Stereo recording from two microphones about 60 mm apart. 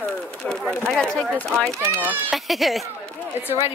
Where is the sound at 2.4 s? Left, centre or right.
Centre.